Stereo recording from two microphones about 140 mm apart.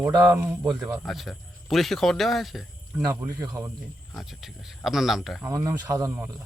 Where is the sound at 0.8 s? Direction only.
15° right (ahead or behind).